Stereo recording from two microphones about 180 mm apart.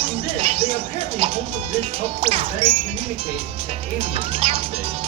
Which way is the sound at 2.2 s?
35° right (ahead or behind).